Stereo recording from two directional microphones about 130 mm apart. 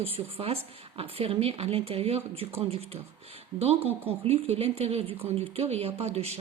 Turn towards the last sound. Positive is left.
turn(degrees=-55)  # may be behind; listen again after turning